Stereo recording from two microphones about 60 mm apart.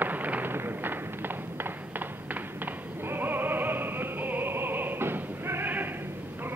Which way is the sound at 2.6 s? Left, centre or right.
Right.